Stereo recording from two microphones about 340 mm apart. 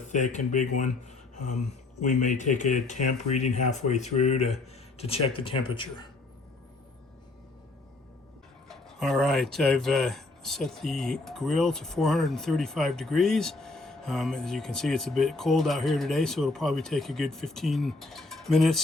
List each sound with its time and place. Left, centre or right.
0.1 s speech: left
2.0 s speech: left
8.6 s speech: centre